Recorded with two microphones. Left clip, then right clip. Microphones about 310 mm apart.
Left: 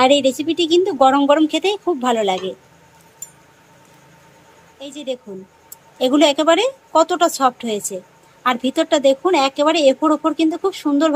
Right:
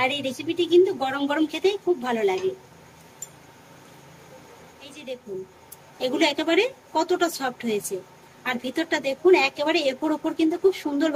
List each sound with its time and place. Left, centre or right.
0.0 s speech: centre
5.9 s speech: centre